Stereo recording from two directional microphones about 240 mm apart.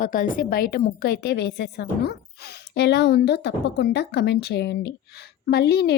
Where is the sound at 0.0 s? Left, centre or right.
Left.